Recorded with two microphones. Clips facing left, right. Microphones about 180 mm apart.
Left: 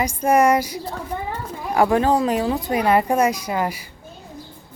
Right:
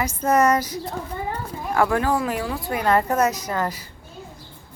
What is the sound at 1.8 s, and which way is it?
Speech, 20° left (ahead or behind).